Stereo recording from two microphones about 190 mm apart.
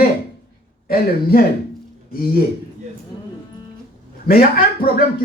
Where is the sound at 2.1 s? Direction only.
50° left (ahead or behind).